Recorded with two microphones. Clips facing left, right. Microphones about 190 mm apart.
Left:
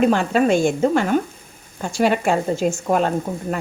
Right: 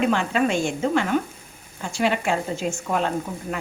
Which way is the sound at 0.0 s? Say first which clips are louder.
Left 5 dB; 40° left (ahead or behind).